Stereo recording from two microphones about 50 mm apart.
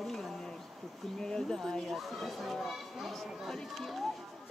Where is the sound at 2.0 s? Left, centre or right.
Centre.